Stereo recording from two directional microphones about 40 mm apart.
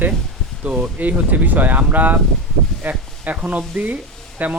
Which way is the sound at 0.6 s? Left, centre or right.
Right.